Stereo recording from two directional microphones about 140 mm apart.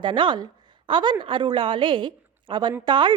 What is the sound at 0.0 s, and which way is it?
A woman's voice, 35° right (ahead or behind).